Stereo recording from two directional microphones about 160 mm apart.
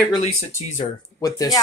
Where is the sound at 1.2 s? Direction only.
25° left (ahead or behind).